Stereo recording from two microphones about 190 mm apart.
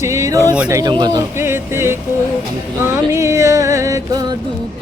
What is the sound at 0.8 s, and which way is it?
Speech, 20° right (ahead or behind).